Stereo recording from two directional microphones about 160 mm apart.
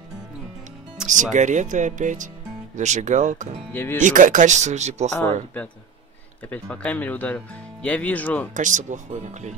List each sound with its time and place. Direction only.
1.0 s speech: 50° right (ahead or behind)
3.7 s speech: 15° left (ahead or behind)
4.0 s speech: 55° right (ahead or behind)
5.1 s speech: 10° left (ahead or behind)
8.5 s speech: 50° right (ahead or behind)